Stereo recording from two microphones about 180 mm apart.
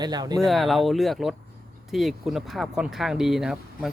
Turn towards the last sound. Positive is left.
turn(degrees=0)  # may be behind; listen again after turning